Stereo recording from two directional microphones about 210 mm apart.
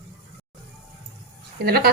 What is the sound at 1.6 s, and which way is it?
Speech, 45° right (ahead or behind).